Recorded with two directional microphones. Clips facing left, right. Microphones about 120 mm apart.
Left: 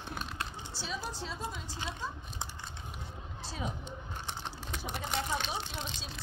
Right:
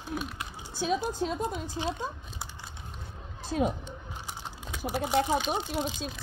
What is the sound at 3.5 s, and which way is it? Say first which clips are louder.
Speech: right 12 dB; 60° right (ahead or behind).